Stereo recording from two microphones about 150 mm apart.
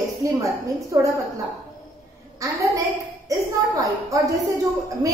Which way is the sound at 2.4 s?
20° right (ahead or behind).